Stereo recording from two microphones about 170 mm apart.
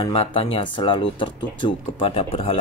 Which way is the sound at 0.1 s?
35° left (ahead or behind).